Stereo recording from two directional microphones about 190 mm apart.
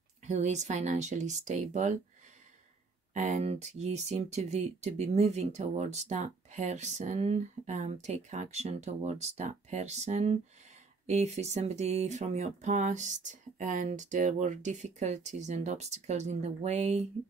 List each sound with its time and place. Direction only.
0.2 s speech: 40° right (ahead or behind)
3.1 s speech: 40° right (ahead or behind)